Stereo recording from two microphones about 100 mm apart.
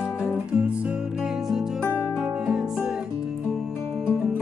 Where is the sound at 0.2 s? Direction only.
10° right (ahead or behind).